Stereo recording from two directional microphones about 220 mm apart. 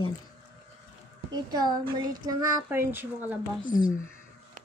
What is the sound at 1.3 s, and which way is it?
Speech, 20° right (ahead or behind).